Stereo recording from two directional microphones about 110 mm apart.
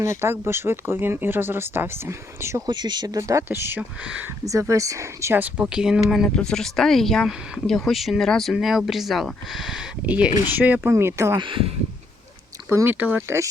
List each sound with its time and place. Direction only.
0.0 s speech: 25° right (ahead or behind)
2.6 s speech: 40° right (ahead or behind)
3.2 s speech: 30° right (ahead or behind)
4.0 s speech: 10° right (ahead or behind)
4.7 s speech: 30° right (ahead or behind)
11.3 s speech: 50° right (ahead or behind)
12.6 s speech: 20° right (ahead or behind)